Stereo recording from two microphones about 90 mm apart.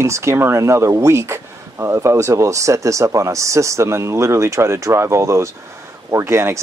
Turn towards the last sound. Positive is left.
turn(degrees=-30)  # may be behind; listen again after turning